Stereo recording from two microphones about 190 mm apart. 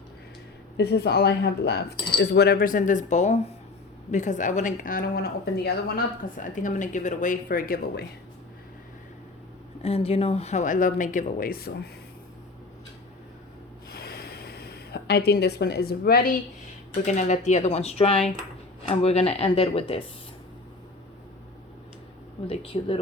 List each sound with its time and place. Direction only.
0.8 s a woman's voice: 60° left (ahead or behind)
9.8 s speech: 30° left (ahead or behind); by 11.9 s 55° left (ahead or behind)
13.9 s a sound: 55° left (ahead or behind)
17.1 s speech: 40° left (ahead or behind)
22.4 s speech: 30° left (ahead or behind)